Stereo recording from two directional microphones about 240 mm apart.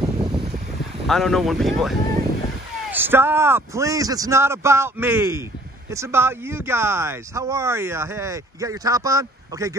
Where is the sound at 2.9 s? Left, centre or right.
Centre.